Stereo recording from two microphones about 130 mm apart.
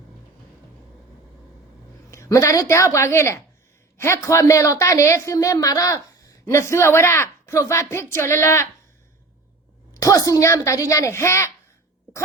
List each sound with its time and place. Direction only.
2.0 s a woman's voice: 20° left (ahead or behind)
9.9 s a woman's voice: 25° left (ahead or behind)